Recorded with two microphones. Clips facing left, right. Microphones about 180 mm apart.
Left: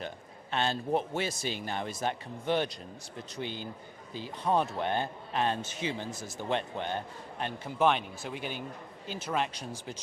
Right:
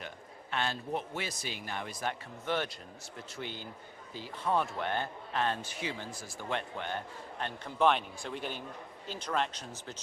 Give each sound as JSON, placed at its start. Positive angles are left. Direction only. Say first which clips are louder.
{"t": 0.5, "sound": "a man's voice", "louder": "left 5 dB", "side_deg": 25}
{"t": 7.6, "sound": "speech", "louder": "left 1 dB", "side_deg": 5}